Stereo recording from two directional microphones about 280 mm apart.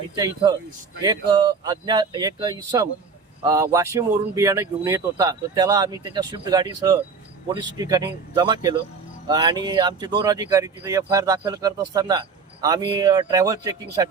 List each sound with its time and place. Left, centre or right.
0.2 s speech: centre